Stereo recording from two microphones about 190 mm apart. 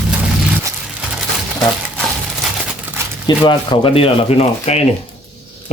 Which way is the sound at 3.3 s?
25° left (ahead or behind).